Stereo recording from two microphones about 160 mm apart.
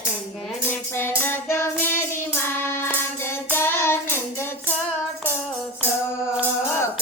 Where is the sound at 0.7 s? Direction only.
15° left (ahead or behind).